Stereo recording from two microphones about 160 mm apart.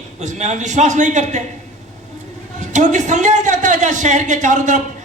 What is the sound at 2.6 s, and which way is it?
A man's voice, 50° right (ahead or behind).